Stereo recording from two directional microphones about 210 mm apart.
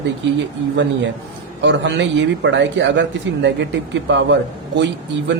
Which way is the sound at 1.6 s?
55° right (ahead or behind).